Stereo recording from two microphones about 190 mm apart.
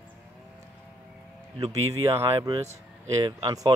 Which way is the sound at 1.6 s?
15° right (ahead or behind).